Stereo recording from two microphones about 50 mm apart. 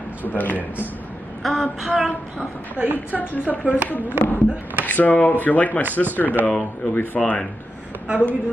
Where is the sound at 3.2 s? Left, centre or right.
Left.